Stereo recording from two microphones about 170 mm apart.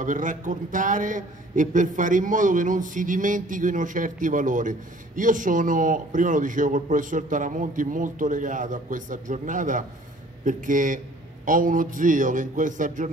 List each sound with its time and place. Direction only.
0.0 s a man's voice: 50° right (ahead or behind)